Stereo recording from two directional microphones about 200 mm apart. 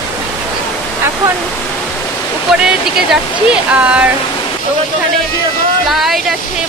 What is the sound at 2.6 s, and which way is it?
Speech, 5° right (ahead or behind).